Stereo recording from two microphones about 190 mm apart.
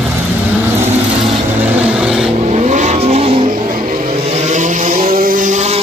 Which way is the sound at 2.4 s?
40° right (ahead or behind).